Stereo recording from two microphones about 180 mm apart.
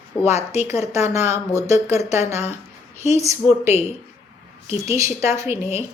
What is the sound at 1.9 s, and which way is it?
Speech, 35° left (ahead or behind).